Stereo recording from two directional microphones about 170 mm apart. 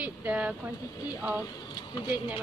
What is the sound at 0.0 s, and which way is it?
Speech, 10° right (ahead or behind).